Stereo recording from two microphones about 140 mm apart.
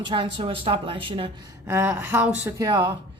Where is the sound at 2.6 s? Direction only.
25° right (ahead or behind).